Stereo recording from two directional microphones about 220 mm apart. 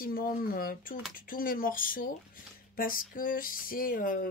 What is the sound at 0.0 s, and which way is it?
Speech, 40° left (ahead or behind).